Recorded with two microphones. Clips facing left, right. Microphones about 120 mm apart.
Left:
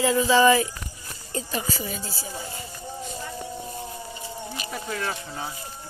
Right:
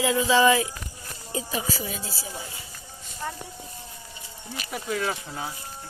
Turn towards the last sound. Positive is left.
turn(degrees=-5)  # may be behind; listen again after turning